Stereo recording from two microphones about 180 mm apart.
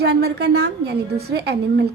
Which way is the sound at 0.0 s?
65° right (ahead or behind).